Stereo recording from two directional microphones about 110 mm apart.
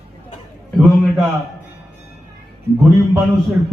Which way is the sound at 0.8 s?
Centre (ahead or behind).